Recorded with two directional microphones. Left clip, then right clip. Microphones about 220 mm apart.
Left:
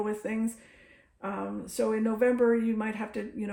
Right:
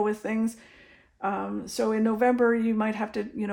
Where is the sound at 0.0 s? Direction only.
35° right (ahead or behind).